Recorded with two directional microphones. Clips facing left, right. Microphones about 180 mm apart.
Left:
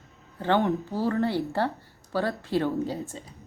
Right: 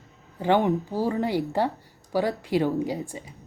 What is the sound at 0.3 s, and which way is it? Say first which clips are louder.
Speech: right 2 dB; 15° right (ahead or behind).